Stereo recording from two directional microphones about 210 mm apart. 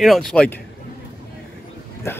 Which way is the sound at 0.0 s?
Centre (ahead or behind).